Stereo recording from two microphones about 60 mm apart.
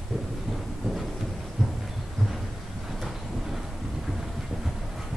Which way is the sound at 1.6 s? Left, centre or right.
Centre.